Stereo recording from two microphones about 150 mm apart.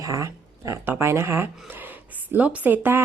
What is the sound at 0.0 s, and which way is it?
Speech, 20° right (ahead or behind).